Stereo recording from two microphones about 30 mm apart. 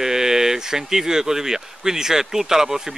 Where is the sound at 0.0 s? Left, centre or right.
Centre.